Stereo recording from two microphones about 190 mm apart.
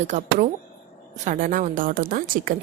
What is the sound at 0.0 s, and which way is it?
Speech, 40° right (ahead or behind).